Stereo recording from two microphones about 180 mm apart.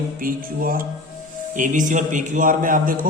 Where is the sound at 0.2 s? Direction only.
50° right (ahead or behind).